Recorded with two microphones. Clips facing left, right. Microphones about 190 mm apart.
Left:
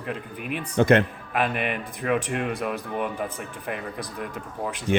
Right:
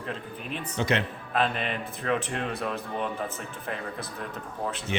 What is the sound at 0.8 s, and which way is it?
Speech, 50° left (ahead or behind).